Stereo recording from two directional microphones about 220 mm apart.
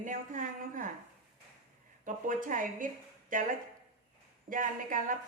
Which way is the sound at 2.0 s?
35° right (ahead or behind).